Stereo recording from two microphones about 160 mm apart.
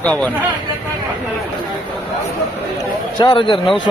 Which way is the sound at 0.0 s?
10° left (ahead or behind).